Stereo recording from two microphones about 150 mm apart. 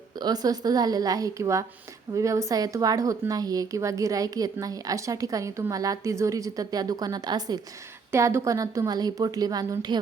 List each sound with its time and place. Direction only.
0.2 s a woman's voice: 25° right (ahead or behind)